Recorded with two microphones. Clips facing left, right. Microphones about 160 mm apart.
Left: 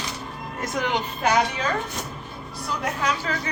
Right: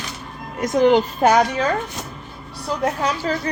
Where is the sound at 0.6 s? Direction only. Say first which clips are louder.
Right 11 dB; 30° right (ahead or behind).